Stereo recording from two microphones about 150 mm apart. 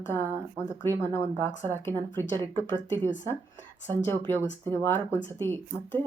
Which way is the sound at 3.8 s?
15° left (ahead or behind).